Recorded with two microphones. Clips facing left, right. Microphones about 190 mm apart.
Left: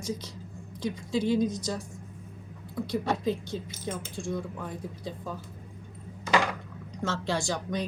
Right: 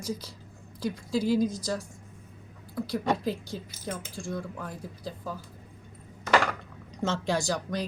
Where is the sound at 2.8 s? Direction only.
5° right (ahead or behind).